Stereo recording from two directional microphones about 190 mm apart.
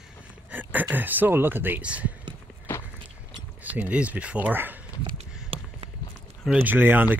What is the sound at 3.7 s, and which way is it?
Speech, 10° right (ahead or behind).